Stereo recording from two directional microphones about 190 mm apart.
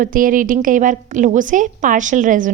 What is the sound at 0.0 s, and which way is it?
A woman's voice, 45° right (ahead or behind).